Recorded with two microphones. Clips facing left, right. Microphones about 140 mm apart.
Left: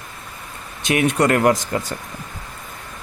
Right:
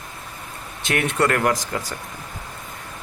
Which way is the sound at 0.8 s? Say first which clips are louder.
Left 4 dB; 15° left (ahead or behind).